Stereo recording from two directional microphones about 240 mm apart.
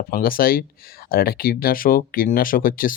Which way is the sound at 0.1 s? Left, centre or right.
Left.